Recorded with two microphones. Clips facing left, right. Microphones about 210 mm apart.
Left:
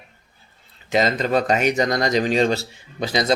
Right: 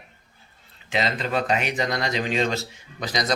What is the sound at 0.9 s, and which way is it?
Speech, 40° left (ahead or behind).